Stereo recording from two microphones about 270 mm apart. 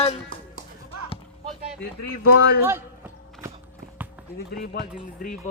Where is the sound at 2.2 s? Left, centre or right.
Left.